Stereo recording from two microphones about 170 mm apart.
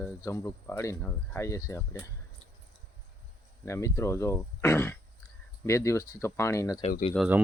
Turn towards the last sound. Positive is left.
turn(degrees=-5)  # may be behind; listen again after turning